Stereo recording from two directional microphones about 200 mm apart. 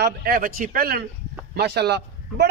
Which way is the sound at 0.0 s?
50° right (ahead or behind).